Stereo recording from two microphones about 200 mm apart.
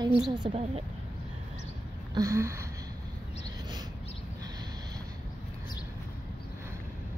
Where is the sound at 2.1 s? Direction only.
15° right (ahead or behind).